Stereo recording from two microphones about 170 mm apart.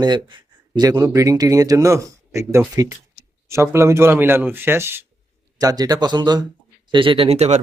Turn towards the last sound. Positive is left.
turn(degrees=-40)  # may be behind; listen again after turning